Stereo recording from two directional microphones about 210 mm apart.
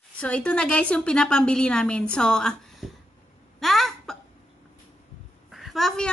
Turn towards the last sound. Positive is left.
turn(degrees=0)  # may be behind; listen again after turning